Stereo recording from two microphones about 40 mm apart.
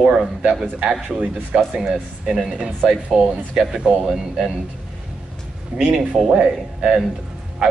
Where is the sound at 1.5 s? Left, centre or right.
Right.